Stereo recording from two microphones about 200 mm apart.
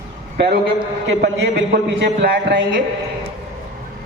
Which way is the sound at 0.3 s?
55° right (ahead or behind).